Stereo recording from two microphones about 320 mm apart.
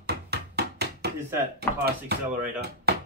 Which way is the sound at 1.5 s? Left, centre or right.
Right.